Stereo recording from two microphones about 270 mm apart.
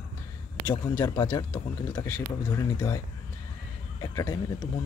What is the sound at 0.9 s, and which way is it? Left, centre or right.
Speech, centre.